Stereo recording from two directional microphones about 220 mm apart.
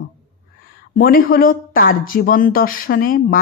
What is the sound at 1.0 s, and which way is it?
A woman's voice, 45° left (ahead or behind).